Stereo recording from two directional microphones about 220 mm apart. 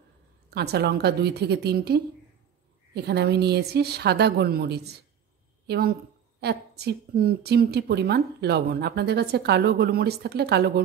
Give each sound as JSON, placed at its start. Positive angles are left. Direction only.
{"t": 0.5, "sound": "a woman's voice", "side_deg": -45}